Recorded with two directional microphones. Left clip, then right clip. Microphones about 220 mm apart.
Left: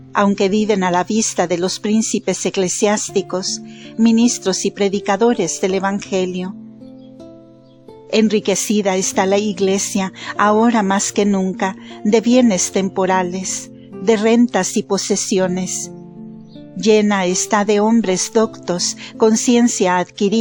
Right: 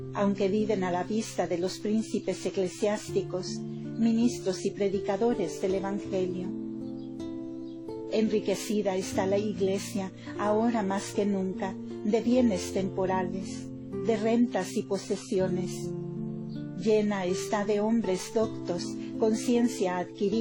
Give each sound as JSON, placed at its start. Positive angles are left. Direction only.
{"t": 0.1, "sound": "a woman's voice", "side_deg": 35}
{"t": 8.1, "sound": "a woman's voice", "side_deg": 35}
{"t": 16.8, "sound": "a woman's voice", "side_deg": 35}